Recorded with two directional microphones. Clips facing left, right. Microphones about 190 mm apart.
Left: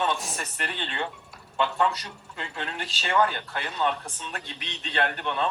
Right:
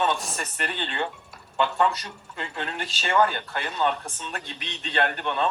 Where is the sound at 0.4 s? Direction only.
50° right (ahead or behind).